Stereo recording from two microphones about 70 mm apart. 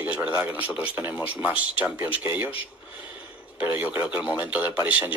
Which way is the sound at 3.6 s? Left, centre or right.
Right.